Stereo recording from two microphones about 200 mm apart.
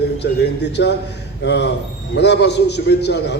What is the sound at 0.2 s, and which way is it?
A man's voice, 55° left (ahead or behind).